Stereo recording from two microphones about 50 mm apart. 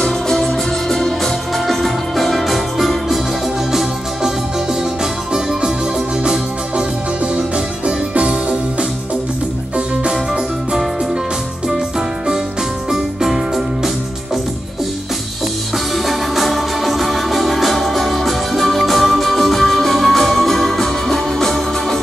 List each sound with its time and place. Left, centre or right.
0.0 s music: centre
3.7 s music: centre
5.3 s organ: centre
7.3 s music: right
12.9 s music: centre
15.9 s music: centre